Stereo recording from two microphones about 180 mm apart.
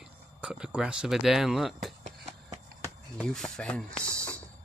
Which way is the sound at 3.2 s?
5° left (ahead or behind).